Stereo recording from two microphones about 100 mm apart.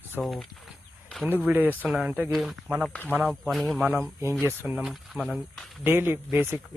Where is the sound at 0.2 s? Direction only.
Centre (ahead or behind).